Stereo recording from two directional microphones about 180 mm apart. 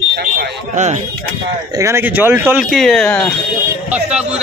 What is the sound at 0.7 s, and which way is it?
Speech, 40° right (ahead or behind).